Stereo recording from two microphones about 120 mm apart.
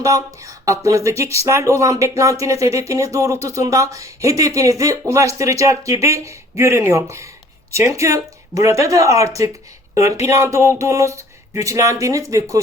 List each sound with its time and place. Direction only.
0.9 s speech: 25° right (ahead or behind)